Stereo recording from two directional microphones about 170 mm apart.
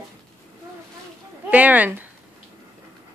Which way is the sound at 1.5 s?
10° right (ahead or behind).